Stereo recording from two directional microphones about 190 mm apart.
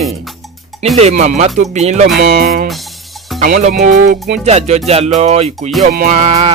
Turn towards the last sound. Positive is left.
turn(degrees=-35)  # may be behind; listen again after turning